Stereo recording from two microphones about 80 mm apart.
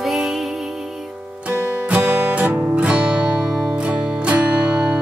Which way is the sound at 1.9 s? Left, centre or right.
Right.